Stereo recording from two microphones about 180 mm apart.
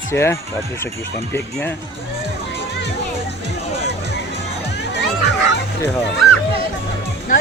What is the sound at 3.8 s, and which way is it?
Music, 70° right (ahead or behind).